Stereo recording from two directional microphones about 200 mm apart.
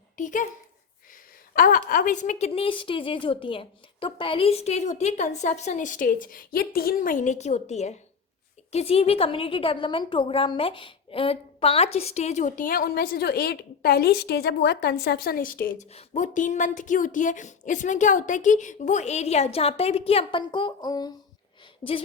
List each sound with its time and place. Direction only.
0.2 s speech: 40° left (ahead or behind)
1.5 s a woman's voice: 45° left (ahead or behind); by 21.1 s 20° left (ahead or behind)